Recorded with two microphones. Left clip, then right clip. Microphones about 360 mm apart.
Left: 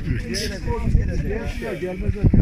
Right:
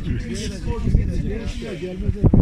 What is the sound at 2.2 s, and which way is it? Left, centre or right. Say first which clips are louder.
Speech: right 3 dB; right.